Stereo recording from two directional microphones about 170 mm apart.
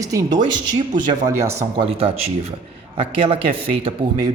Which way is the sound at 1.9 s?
35° right (ahead or behind).